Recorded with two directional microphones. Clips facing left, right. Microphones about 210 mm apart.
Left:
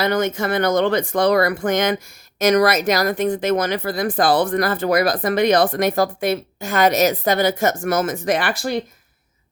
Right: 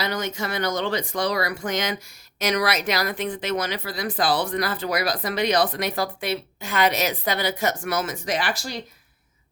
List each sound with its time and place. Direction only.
0.0 s speech: 55° left (ahead or behind)